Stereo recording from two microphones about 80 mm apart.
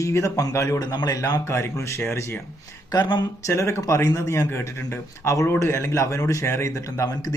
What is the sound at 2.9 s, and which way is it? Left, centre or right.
Speech, left.